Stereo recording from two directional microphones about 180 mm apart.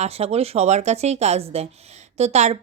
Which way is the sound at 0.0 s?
35° right (ahead or behind).